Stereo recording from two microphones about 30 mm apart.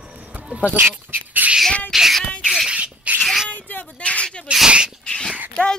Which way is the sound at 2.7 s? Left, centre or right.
Right.